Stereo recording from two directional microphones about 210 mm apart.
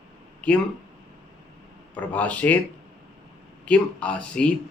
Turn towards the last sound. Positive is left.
turn(degrees=5)  # may be behind; listen again after turning